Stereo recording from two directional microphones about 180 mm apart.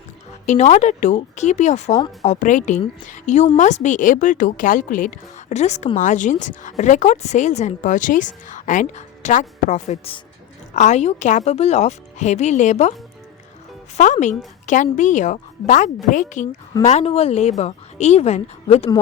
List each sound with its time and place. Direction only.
0.4 s speech: 40° left (ahead or behind)
13.9 s speech: 45° left (ahead or behind)